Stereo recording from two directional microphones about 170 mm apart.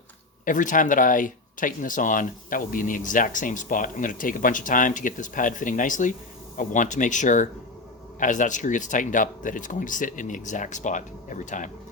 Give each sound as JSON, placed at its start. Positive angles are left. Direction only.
{"t": 0.4, "sound": "speech", "side_deg": 50}